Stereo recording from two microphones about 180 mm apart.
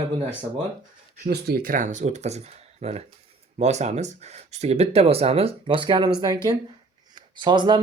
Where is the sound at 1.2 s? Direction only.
55° right (ahead or behind).